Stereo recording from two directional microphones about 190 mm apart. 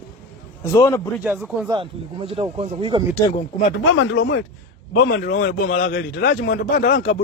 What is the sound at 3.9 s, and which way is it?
Speech, 90° left.